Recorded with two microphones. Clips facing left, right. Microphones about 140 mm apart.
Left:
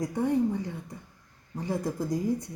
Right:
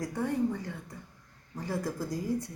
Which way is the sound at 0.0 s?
20° left (ahead or behind).